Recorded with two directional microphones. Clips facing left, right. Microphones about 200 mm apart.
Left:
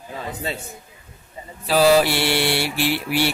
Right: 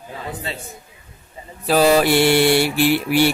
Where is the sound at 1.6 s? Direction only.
50° right (ahead or behind).